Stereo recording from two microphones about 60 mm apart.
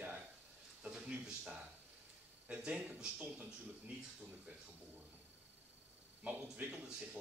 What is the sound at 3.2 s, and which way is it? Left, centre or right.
Speech, right.